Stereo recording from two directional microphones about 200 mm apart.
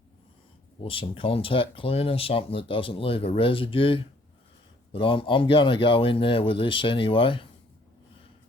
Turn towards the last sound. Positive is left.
turn(degrees=25)  # may be behind; listen again after turning